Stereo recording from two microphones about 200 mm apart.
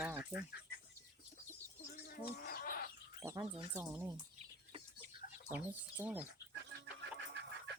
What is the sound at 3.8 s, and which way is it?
Speech, 10° right (ahead or behind).